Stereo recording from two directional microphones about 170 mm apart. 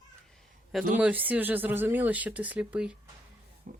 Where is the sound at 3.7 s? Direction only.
50° right (ahead or behind).